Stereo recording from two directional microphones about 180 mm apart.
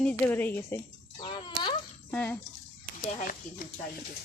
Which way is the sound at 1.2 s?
25° left (ahead or behind).